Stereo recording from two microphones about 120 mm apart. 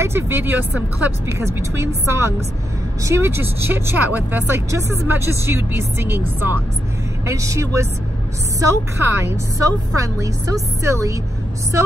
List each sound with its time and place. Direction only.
0.0 s speech: 20° right (ahead or behind)